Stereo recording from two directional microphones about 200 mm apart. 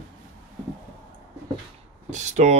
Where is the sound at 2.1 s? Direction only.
35° right (ahead or behind).